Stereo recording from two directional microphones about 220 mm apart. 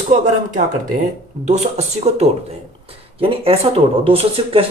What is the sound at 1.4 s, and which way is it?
Speech, 30° right (ahead or behind).